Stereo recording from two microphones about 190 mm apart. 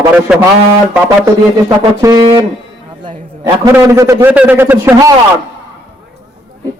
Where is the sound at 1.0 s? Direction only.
15° right (ahead or behind).